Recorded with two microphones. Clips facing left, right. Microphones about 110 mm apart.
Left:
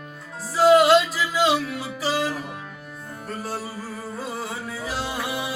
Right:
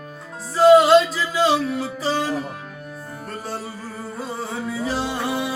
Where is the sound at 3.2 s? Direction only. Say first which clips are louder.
Even; centre (ahead or behind).